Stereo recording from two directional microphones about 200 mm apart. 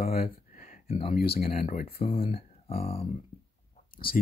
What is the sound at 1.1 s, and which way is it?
Speech, 50° left (ahead or behind).